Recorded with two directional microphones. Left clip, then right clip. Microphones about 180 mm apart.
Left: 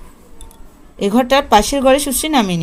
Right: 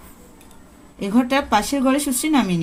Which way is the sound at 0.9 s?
50° left (ahead or behind).